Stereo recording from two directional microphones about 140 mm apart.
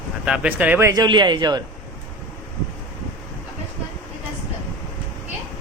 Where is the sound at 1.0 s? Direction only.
30° right (ahead or behind).